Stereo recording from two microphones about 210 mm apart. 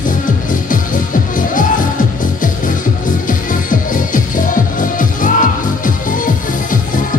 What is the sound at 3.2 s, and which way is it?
Music, 40° left (ahead or behind).